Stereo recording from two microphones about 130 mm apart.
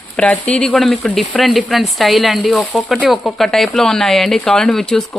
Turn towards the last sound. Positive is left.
turn(degrees=5)  # may be behind; listen again after turning